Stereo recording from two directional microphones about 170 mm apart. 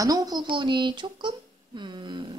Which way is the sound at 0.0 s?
20° right (ahead or behind).